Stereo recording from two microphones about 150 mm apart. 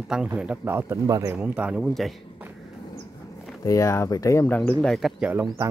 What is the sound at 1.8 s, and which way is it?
Speech, centre (ahead or behind).